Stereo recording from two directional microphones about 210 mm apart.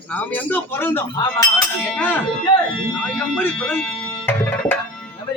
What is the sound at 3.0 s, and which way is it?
Music, 5° left (ahead or behind).